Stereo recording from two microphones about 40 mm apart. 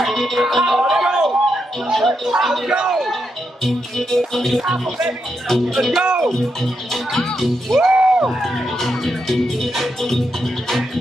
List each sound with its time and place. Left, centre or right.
0.0 s music: centre
0.6 s a sound: centre
2.0 s music: centre
2.3 s speech: centre
2.7 s a man's voice: centre
3.6 s music: centre
5.5 s speech: centre
7.8 s a sound: right
8.3 s music: centre